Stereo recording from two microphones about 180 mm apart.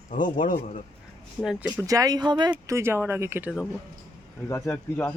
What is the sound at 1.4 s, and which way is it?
Speech, centre (ahead or behind).